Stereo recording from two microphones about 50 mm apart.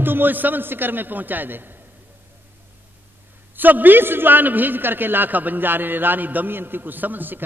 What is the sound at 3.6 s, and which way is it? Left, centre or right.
A man's voice, right.